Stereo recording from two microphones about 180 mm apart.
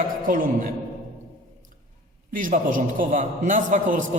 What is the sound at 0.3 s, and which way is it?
Speech, 50° right (ahead or behind).